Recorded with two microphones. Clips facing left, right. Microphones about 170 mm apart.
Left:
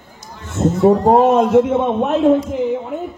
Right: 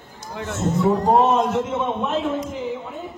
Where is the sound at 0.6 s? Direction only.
60° left (ahead or behind).